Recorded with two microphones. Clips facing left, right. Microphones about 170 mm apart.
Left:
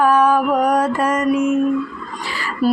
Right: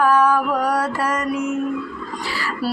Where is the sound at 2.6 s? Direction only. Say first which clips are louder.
Left 8 dB; 15° left (ahead or behind).